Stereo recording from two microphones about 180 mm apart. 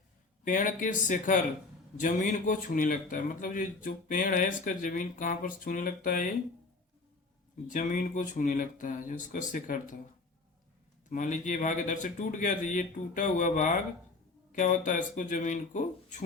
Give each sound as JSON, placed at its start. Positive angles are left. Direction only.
{"t": 0.4, "sound": "speech", "side_deg": 45}
{"t": 7.7, "sound": "speech", "side_deg": 45}
{"t": 11.1, "sound": "speech", "side_deg": 45}